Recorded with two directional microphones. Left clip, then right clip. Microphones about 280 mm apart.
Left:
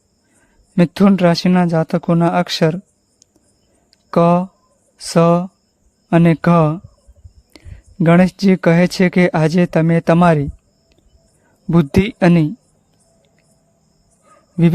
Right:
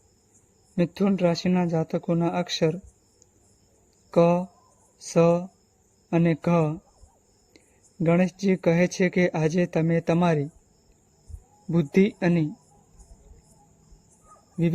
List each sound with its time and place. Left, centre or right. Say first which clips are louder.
0.8 s speech: left 10 dB; left
3.9 s a sound: left 7 dB; left
4.9 s speech: left 7 dB; left
11.7 s speech: left 6 dB; left